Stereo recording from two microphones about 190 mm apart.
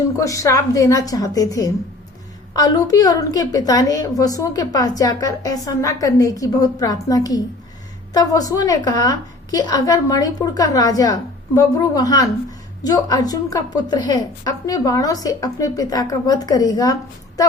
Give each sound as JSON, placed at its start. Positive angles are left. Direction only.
{"t": 0.2, "sound": "a woman's voice", "side_deg": 15}